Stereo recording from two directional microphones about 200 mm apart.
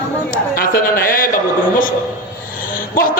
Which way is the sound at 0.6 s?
45° left (ahead or behind).